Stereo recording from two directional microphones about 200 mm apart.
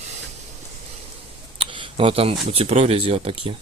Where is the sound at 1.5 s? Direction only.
25° right (ahead or behind).